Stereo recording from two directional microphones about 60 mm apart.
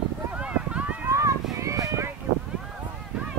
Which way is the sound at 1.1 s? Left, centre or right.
Right.